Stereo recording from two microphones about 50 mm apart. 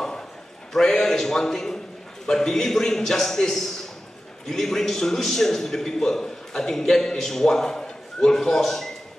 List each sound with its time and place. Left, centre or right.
0.7 s a man's voice: centre